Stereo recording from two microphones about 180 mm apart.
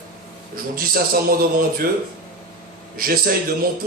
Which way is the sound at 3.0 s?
55° right (ahead or behind).